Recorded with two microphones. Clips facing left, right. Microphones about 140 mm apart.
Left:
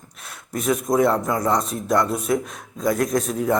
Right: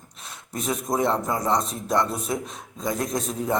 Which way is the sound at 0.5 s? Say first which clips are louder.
Left 6 dB; 25° right (ahead or behind).